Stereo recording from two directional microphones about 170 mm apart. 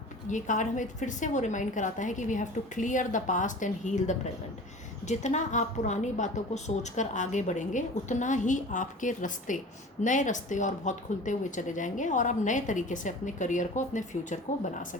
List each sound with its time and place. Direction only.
0.3 s speech: 45° left (ahead or behind)